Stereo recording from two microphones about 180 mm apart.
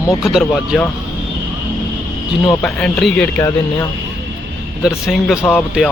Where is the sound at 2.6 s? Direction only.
5° left (ahead or behind).